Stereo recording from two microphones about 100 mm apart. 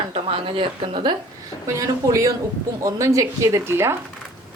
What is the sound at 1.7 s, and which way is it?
A woman's voice, 35° right (ahead or behind).